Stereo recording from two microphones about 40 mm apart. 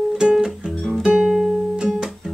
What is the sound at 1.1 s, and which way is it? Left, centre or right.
Music, centre.